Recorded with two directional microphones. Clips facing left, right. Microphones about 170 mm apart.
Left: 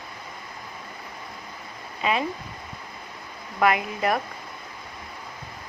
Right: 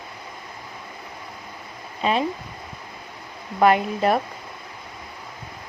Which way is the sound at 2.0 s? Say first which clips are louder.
Right 3 dB; 30° right (ahead or behind).